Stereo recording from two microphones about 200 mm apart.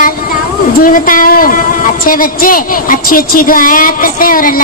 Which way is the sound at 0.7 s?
45° left (ahead or behind).